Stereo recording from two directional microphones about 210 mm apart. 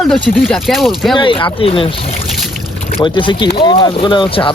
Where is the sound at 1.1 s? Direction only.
25° left (ahead or behind).